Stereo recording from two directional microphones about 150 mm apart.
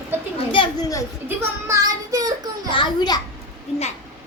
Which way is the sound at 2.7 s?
30° left (ahead or behind).